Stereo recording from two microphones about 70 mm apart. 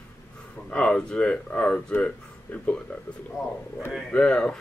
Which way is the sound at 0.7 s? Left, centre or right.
Centre.